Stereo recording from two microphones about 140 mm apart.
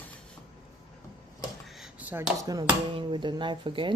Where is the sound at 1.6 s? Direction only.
Centre (ahead or behind).